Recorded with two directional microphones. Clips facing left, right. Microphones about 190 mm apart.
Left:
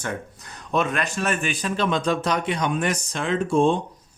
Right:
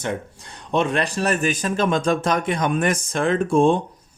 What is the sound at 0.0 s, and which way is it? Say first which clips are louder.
A man's voice: right 4 dB; 25° right (ahead or behind).